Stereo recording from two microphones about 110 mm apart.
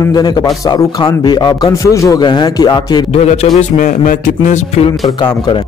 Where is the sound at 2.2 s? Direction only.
40° left (ahead or behind).